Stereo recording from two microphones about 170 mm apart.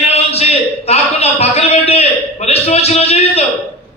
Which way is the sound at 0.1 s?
35° left (ahead or behind).